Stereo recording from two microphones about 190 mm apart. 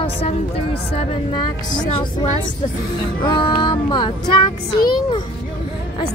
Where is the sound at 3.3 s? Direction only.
25° left (ahead or behind).